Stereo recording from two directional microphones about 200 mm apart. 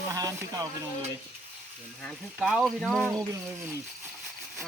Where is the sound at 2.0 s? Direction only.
Centre (ahead or behind).